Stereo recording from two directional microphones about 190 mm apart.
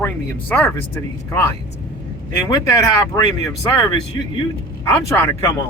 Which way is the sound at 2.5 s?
20° left (ahead or behind).